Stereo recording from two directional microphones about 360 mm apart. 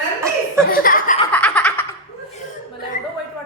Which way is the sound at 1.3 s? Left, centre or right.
Centre.